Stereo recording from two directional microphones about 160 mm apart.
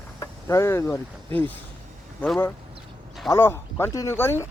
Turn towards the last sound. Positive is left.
turn(degrees=15)  # may be behind; listen again after turning